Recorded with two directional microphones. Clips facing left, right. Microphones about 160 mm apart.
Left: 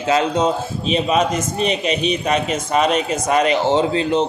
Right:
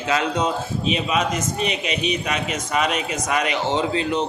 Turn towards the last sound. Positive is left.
turn(degrees=30)  # may be behind; listen again after turning